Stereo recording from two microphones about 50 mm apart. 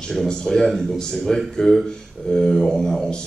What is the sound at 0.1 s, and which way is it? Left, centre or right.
A man's voice, centre.